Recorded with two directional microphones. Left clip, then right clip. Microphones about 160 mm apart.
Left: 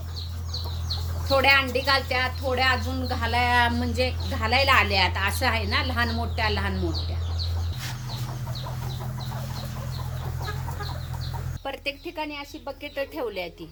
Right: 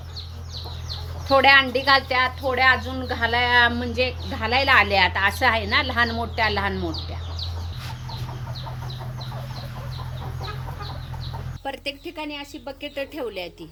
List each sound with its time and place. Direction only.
1.3 s speech: 30° right (ahead or behind)
11.6 s speech: 35° right (ahead or behind)